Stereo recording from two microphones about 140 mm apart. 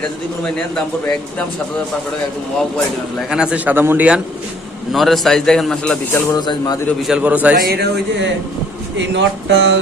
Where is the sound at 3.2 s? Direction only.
5° right (ahead or behind).